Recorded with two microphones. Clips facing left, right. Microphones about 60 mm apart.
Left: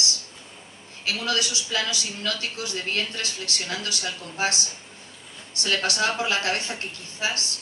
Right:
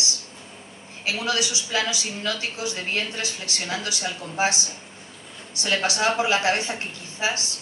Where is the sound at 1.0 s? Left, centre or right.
Centre.